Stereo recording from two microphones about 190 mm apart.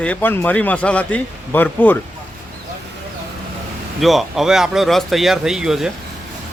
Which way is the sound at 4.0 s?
Centre (ahead or behind).